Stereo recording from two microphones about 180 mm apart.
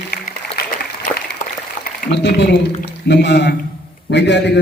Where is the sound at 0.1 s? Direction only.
60° left (ahead or behind).